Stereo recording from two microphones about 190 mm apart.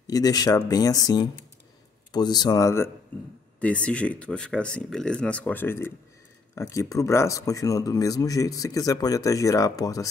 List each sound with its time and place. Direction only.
0.0 s speech: 20° left (ahead or behind)